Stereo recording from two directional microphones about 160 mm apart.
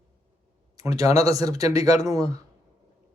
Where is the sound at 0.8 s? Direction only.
20° right (ahead or behind).